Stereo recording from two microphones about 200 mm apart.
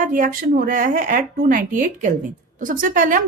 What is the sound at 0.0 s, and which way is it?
A woman's voice, 40° right (ahead or behind).